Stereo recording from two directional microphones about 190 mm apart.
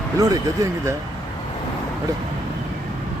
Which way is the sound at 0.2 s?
20° right (ahead or behind).